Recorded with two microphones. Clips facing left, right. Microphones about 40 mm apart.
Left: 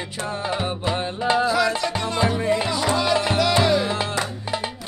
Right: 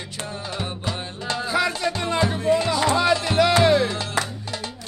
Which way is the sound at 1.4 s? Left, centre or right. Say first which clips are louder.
Left 2 dB; centre.